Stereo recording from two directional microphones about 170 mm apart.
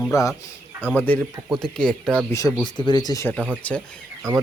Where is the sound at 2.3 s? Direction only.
25° left (ahead or behind).